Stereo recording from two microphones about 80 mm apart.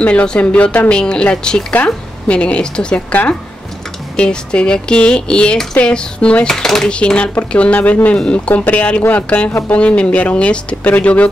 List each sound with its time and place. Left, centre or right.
0.0 s speech: centre
4.2 s speech: centre
9.5 s speech: left
9.8 s speech: centre